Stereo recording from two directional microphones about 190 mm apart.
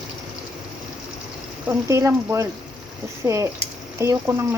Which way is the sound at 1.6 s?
15° right (ahead or behind).